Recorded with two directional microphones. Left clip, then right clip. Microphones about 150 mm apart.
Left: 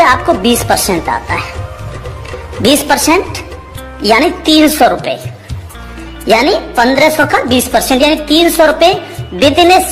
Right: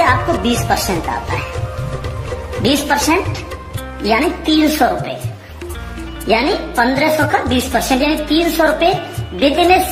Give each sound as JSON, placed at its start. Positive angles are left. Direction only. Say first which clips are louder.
{"t": 0.0, "sound": "speech", "louder": "left 6 dB", "side_deg": 50}
{"t": 2.6, "sound": "a woman's voice", "louder": "left 5 dB", "side_deg": 50}
{"t": 6.2, "sound": "a woman's voice", "louder": "left 6 dB", "side_deg": 50}